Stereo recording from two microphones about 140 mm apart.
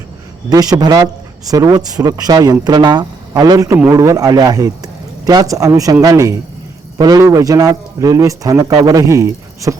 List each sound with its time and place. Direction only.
0.5 s a man's voice: 25° right (ahead or behind)